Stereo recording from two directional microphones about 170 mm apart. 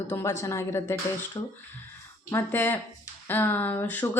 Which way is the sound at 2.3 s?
15° left (ahead or behind).